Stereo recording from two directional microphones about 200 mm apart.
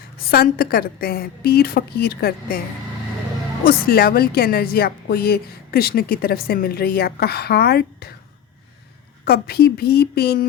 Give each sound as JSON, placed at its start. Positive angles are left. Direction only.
{"t": 0.3, "sound": "speech", "side_deg": 50}
{"t": 3.6, "sound": "speech", "side_deg": 50}
{"t": 9.2, "sound": "speech", "side_deg": 55}